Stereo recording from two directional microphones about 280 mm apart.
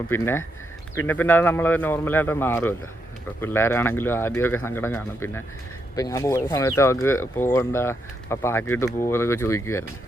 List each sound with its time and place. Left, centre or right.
0.1 s speech: centre